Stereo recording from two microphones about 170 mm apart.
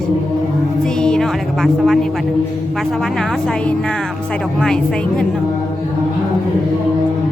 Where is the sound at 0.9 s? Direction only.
5° left (ahead or behind).